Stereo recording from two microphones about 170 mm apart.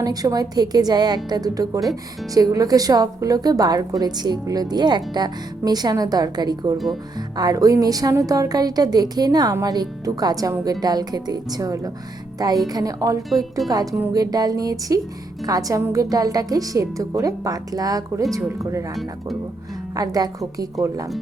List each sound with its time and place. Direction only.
0.0 s a woman's voice: 20° right (ahead or behind)
20.0 s a woman's voice: 20° right (ahead or behind)